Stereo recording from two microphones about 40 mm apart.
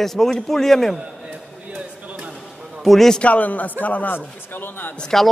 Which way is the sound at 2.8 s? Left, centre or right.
Centre.